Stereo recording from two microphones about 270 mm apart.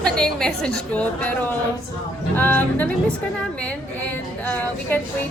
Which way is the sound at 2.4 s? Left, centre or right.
Centre.